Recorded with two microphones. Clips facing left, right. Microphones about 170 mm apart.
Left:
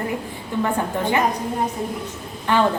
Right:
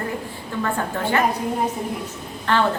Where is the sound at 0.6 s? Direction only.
15° left (ahead or behind).